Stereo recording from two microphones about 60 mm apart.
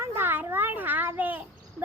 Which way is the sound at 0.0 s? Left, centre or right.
Right.